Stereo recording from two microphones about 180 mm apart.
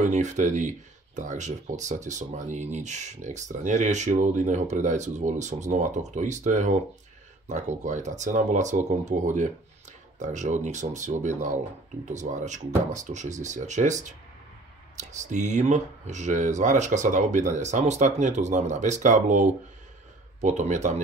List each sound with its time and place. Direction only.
0.0 s speech: 40° right (ahead or behind)